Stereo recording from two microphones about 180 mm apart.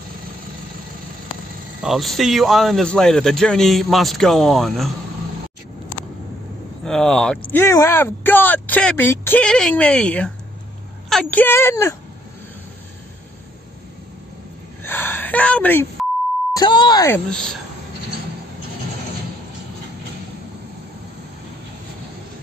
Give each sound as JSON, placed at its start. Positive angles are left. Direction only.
{"t": 1.8, "sound": "speech", "side_deg": 0}
{"t": 6.8, "sound": "speech", "side_deg": 5}
{"t": 7.5, "sound": "speech", "side_deg": 15}
{"t": 14.8, "sound": "a sound", "side_deg": 10}
{"t": 16.5, "sound": "speech", "side_deg": 25}
{"t": 17.1, "sound": "speech", "side_deg": 5}